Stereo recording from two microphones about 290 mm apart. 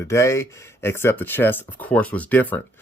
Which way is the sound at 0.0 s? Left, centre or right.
Centre.